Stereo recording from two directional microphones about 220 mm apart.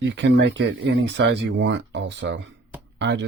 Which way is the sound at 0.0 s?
55° right (ahead or behind).